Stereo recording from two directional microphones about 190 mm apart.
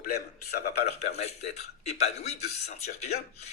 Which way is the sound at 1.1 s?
35° left (ahead or behind).